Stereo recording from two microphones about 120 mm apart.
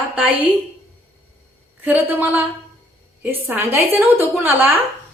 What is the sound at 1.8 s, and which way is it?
A woman's voice, 15° right (ahead or behind).